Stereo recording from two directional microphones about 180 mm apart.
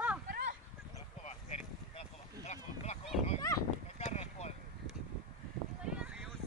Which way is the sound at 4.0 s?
40° left (ahead or behind).